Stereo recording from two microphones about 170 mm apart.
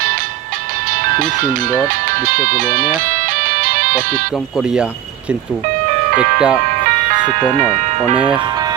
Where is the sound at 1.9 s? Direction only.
55° right (ahead or behind).